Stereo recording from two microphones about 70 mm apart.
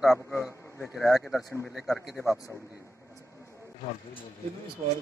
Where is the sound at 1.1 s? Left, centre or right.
Centre.